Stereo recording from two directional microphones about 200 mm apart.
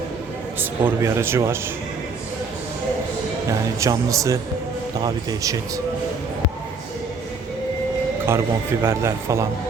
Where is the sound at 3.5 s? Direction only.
15° right (ahead or behind).